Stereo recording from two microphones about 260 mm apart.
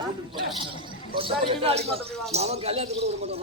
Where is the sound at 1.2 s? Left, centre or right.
Right.